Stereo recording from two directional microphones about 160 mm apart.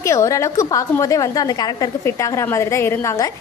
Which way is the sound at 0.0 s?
20° left (ahead or behind).